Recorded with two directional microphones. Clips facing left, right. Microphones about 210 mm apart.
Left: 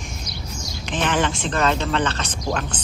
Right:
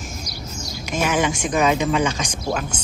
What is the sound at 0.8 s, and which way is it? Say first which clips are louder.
Speech: right 1 dB; 10° right (ahead or behind).